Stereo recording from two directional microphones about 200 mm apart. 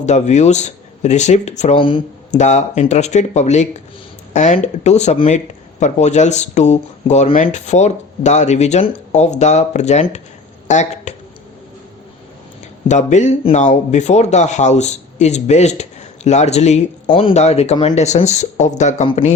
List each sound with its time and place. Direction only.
0.0 s speech: 35° left (ahead or behind)
12.9 s speech: 35° left (ahead or behind)